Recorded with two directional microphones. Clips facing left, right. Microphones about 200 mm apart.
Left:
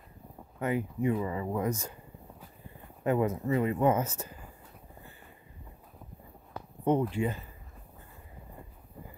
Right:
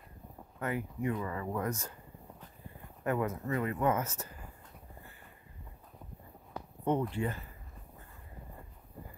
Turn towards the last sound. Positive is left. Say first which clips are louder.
# left 4 dB
turn(degrees=15)  # may be behind; listen again after turning